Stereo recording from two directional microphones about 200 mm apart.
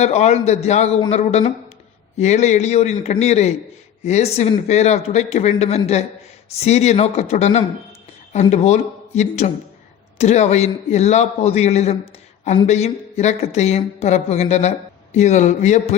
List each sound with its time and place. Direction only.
0.0 s speech: 35° left (ahead or behind)